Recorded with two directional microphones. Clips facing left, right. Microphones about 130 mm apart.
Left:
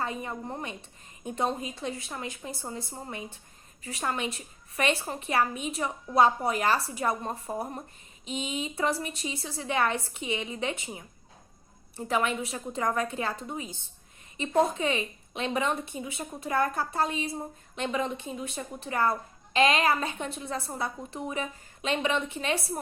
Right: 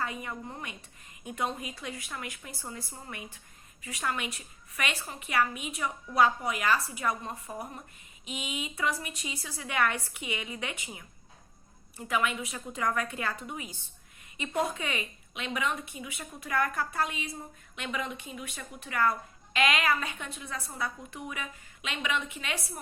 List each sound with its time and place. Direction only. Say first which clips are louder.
0.0 s a woman's voice: left 3 dB; 30° left (ahead or behind)